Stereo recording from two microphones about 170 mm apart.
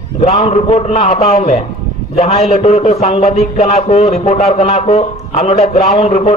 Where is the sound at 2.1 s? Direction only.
40° left (ahead or behind).